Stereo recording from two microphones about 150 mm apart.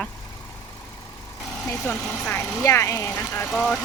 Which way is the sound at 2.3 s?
20° left (ahead or behind).